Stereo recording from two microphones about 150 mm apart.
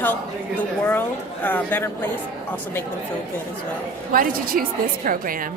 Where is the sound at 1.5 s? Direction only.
15° left (ahead or behind).